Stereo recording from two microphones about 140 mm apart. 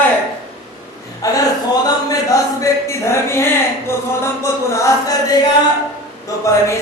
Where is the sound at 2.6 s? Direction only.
20° left (ahead or behind).